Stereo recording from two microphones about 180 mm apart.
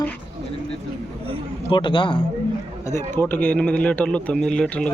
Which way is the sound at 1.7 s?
25° left (ahead or behind).